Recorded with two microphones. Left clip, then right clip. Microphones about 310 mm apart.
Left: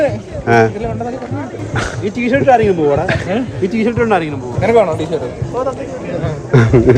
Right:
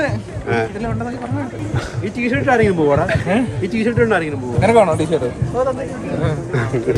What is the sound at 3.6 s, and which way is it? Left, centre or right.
Speech, centre.